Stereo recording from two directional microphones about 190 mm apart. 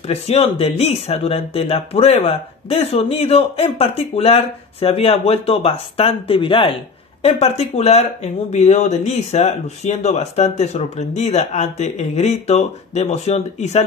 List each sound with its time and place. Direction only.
0.1 s speech: 35° left (ahead or behind)